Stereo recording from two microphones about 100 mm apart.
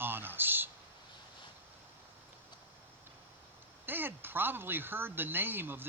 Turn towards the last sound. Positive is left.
turn(degrees=-20)  # may be behind; listen again after turning